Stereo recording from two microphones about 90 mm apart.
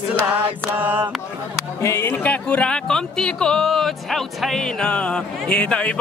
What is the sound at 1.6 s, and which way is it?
Speech, 35° left (ahead or behind).